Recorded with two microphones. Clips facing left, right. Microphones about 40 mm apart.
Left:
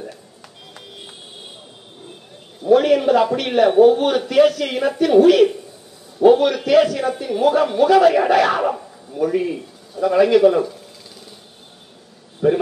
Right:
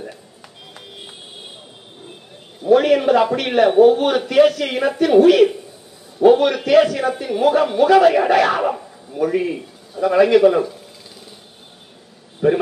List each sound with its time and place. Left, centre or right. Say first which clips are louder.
0.7 s music: right 1 dB; centre
2.6 s a man's voice: even; centre
12.4 s a man's voice: even; centre